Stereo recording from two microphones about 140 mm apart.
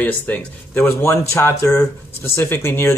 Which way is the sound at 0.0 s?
10° left (ahead or behind).